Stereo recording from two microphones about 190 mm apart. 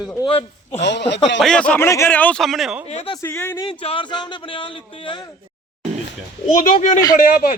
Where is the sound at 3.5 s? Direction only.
25° left (ahead or behind).